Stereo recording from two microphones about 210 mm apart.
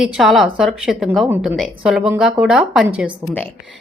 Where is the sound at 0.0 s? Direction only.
Centre (ahead or behind).